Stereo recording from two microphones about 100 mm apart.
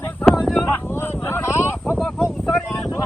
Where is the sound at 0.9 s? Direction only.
25° left (ahead or behind).